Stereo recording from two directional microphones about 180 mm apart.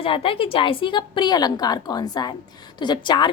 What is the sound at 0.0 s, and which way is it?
A woman's voice, 30° left (ahead or behind).